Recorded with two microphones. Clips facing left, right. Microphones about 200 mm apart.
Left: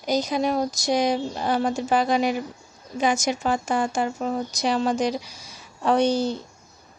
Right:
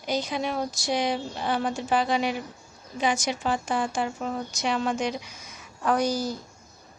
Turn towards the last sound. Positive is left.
turn(degrees=25)  # may be behind; listen again after turning